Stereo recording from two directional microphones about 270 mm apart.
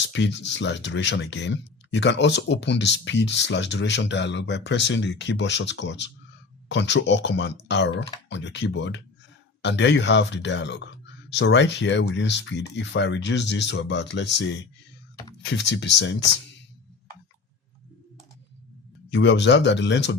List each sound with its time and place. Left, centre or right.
0.1 s speech: left
19.1 s speech: left